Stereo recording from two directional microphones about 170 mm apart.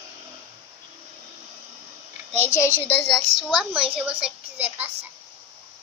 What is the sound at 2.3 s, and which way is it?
Speech, 15° left (ahead or behind).